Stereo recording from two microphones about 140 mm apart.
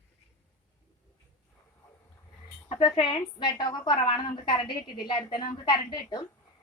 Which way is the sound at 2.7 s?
35° left (ahead or behind).